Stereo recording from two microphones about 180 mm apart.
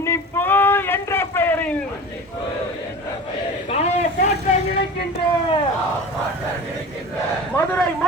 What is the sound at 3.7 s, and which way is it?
Speech, 35° left (ahead or behind).